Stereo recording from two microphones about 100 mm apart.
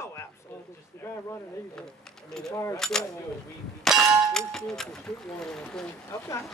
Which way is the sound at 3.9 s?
5° left (ahead or behind).